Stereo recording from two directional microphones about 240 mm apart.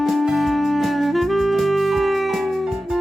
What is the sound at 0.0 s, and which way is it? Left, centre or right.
Music, centre.